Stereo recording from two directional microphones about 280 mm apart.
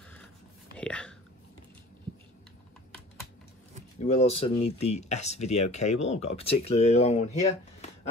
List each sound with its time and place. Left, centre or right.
0.7 s biting: centre
4.0 s speech: left